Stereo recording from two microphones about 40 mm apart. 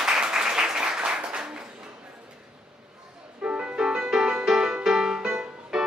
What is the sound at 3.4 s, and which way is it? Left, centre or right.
Music, right.